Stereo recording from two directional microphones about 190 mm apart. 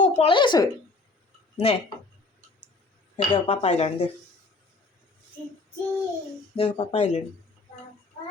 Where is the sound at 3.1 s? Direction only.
35° left (ahead or behind).